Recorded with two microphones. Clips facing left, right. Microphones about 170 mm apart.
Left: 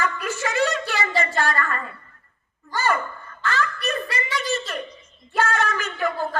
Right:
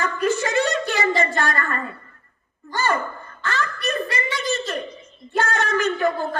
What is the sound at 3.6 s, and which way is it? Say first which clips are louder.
Chuckle: right 3 dB; 40° right (ahead or behind).